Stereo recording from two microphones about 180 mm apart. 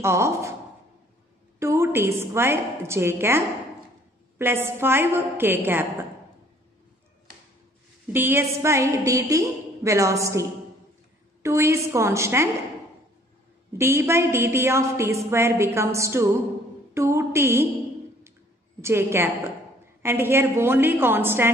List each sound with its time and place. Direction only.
0.0 s a woman's voice: 15° right (ahead or behind)
1.6 s a woman's voice: 15° right (ahead or behind)
8.1 s a woman's voice: 10° right (ahead or behind)
11.4 s a woman's voice: 15° right (ahead or behind)
13.7 s a woman's voice: 15° right (ahead or behind)
16.9 s a sound: 15° right (ahead or behind)
18.8 s a woman's voice: 15° right (ahead or behind)